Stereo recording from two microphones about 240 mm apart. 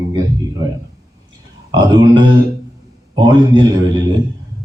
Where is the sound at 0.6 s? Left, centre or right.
Centre.